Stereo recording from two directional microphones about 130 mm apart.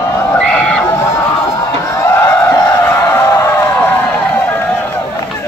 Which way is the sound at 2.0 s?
20° left (ahead or behind).